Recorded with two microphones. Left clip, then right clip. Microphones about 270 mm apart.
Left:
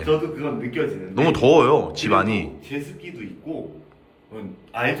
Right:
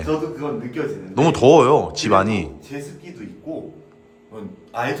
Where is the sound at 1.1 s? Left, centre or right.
Centre.